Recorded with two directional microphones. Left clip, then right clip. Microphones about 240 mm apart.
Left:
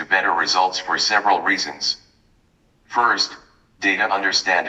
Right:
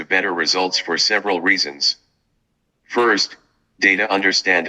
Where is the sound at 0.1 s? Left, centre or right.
Right.